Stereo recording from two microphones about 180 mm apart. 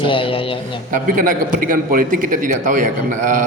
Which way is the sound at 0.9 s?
50° right (ahead or behind).